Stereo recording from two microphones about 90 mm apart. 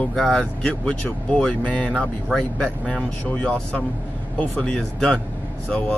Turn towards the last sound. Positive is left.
turn(degrees=15)  # may be behind; listen again after turning